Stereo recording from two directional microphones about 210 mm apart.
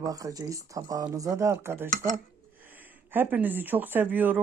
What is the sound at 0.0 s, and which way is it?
Speech, 15° right (ahead or behind).